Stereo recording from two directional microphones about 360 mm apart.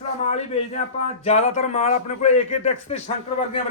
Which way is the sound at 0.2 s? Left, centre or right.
Centre.